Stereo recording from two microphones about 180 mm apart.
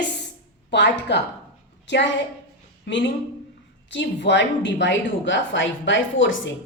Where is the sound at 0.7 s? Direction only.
75° left (ahead or behind).